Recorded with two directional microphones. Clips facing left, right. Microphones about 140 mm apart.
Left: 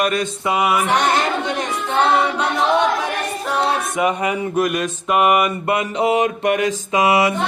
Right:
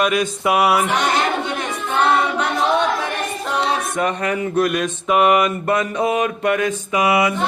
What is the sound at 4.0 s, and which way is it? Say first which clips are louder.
Mantra: left 3 dB; 10° left (ahead or behind).